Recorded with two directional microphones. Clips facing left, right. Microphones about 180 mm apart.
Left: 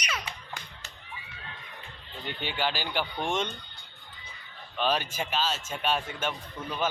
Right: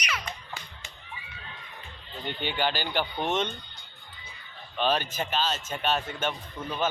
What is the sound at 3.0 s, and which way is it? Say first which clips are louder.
Speech: right 1 dB; 5° right (ahead or behind).